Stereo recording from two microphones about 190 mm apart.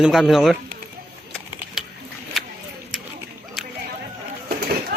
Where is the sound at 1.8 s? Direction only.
Centre (ahead or behind).